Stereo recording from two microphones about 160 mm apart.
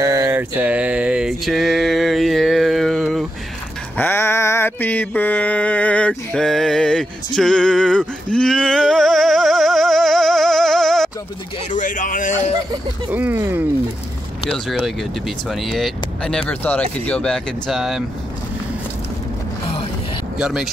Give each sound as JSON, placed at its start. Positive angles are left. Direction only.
{"t": 0.0, "sound": "mantra", "side_deg": -20}
{"t": 3.9, "sound": "mantra", "side_deg": 10}
{"t": 11.7, "sound": "a sound", "side_deg": 55}
{"t": 13.1, "sound": "speech", "side_deg": -10}
{"t": 14.5, "sound": "speech", "side_deg": 0}
{"t": 20.3, "sound": "speech", "side_deg": -5}